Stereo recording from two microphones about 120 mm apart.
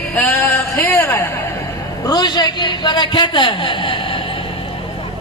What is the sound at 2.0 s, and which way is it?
A man's voice, 35° left (ahead or behind).